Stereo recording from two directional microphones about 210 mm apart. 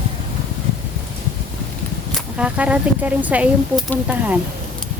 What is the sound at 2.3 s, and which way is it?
Speech, 5° right (ahead or behind).